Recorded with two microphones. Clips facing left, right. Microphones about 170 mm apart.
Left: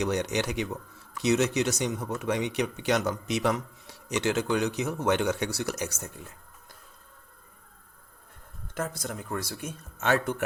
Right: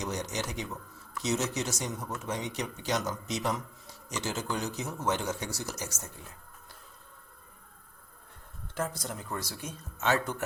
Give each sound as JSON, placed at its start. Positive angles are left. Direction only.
{"t": 0.0, "sound": "speech", "side_deg": 65}
{"t": 9.0, "sound": "speech", "side_deg": 55}